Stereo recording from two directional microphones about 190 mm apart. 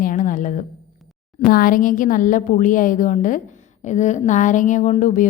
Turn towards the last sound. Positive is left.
turn(degrees=40)  # may be behind; listen again after turning